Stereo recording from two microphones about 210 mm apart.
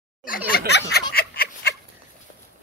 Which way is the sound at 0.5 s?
50° left (ahead or behind).